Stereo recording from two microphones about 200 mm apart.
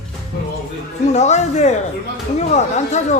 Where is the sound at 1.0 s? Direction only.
35° left (ahead or behind).